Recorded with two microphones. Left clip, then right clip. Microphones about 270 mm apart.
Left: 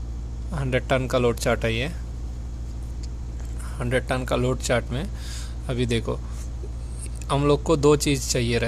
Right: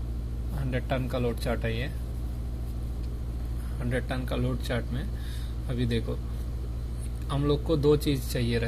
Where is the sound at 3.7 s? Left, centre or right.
Left.